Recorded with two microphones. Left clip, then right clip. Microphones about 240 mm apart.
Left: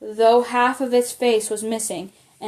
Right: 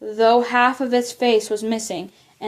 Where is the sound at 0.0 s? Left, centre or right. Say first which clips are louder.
Even; right.